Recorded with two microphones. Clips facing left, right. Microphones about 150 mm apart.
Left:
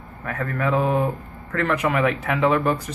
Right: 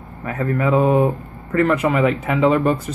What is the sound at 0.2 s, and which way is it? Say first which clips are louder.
A man's voice: right 5 dB; 10° right (ahead or behind).